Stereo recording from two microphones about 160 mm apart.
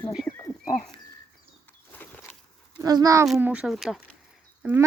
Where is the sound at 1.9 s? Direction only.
10° left (ahead or behind).